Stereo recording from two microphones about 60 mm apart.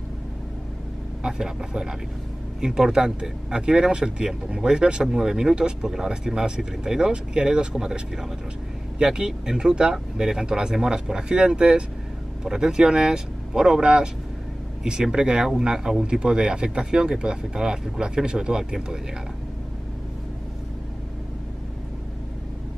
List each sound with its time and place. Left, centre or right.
1.2 s speech: centre